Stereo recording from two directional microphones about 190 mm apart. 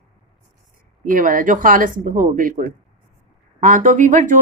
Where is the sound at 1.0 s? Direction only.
45° right (ahead or behind).